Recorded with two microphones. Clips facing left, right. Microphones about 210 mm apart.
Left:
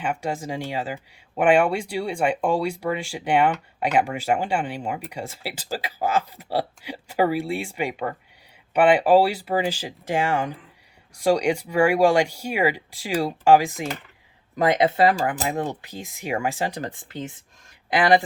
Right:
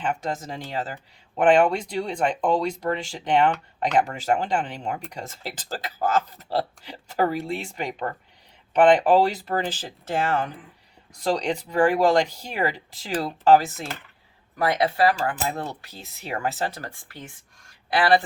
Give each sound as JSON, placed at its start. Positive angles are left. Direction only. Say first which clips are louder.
{"t": 0.0, "sound": "speech", "louder": "left 1 dB", "side_deg": 10}